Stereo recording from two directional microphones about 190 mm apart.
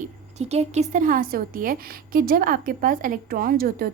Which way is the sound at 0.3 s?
35° right (ahead or behind).